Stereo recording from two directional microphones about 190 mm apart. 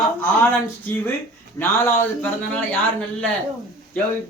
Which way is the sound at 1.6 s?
15° left (ahead or behind).